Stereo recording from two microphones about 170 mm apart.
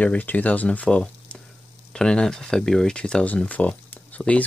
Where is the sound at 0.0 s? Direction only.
10° left (ahead or behind).